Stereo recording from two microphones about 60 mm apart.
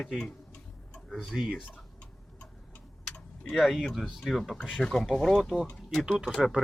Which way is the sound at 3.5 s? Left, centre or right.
Centre.